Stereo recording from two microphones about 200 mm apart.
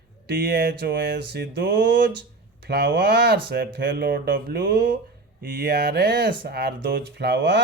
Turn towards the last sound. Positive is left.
turn(degrees=-60)  # may be behind; listen again after turning